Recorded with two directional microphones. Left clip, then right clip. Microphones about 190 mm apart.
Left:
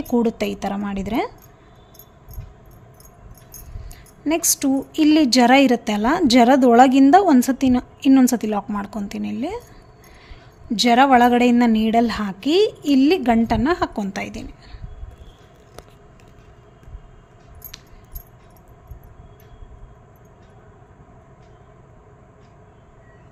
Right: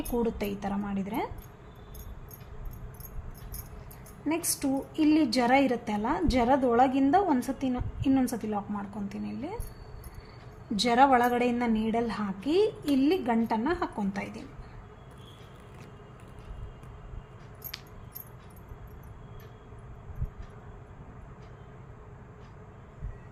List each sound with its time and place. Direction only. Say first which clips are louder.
0.1 s a woman's voice: left 10 dB; 60° left (ahead or behind)
4.3 s a woman's voice: left 10 dB; 55° left (ahead or behind)
10.8 s a woman's voice: left 8 dB; 45° left (ahead or behind)